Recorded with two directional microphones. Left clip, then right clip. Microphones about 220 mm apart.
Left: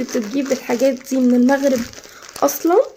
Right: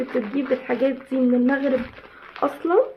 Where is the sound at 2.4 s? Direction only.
45° left (ahead or behind).